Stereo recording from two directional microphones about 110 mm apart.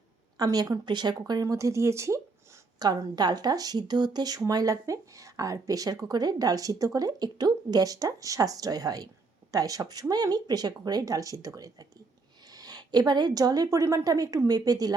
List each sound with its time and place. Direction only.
0.3 s speech: 35° right (ahead or behind)
2.7 s speech: 40° right (ahead or behind)